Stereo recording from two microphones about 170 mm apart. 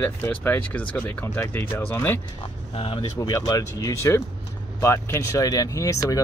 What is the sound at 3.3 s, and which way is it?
Speech, 20° left (ahead or behind).